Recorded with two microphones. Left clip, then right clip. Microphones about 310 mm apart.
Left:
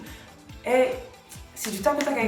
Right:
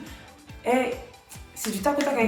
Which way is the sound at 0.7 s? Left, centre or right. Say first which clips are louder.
Left 1 dB; centre.